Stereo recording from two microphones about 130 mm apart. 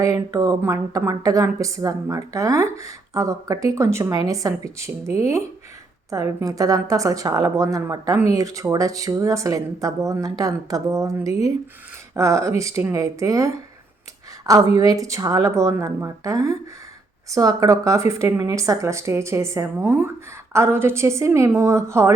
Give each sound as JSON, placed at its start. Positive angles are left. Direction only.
{"t": 0.0, "sound": "speech", "side_deg": -25}